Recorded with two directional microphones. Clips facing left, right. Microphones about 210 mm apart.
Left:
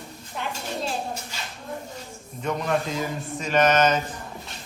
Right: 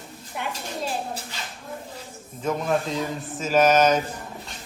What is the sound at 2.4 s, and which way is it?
A man's voice, 5° right (ahead or behind).